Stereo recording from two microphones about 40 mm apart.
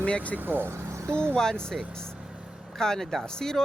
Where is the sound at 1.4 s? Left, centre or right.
Centre.